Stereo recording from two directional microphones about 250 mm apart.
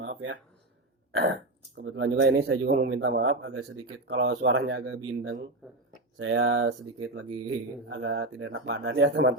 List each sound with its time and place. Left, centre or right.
0.0 s speech: right
1.7 s speech: right